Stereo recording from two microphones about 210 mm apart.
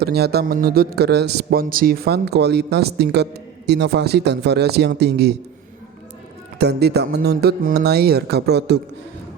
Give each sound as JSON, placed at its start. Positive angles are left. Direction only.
{"t": 0.0, "sound": "a man's voice", "side_deg": -50}
{"t": 6.6, "sound": "a man's voice", "side_deg": -50}